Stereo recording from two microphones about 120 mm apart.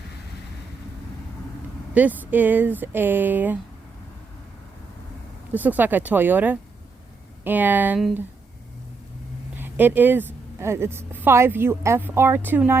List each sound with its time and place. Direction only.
1.9 s a woman's voice: 15° right (ahead or behind)
5.5 s a woman's voice: 15° right (ahead or behind)
9.6 s a woman's voice: 15° right (ahead or behind)